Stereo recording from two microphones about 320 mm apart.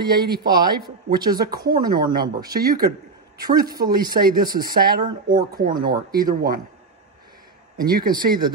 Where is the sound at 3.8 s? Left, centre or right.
Right.